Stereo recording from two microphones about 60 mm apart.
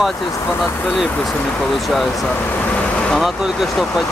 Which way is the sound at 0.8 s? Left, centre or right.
Centre.